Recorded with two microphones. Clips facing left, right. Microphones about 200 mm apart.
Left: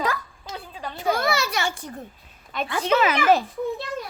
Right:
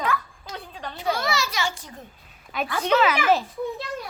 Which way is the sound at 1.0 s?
50° left (ahead or behind).